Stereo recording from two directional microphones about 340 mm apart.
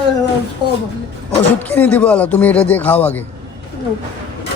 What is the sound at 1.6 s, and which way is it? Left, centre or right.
Speech, centre.